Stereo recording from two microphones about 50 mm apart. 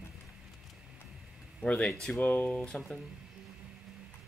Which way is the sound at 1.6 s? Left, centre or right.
Left.